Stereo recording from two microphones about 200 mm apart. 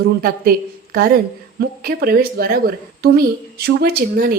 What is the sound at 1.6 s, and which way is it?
Speech, 50° right (ahead or behind).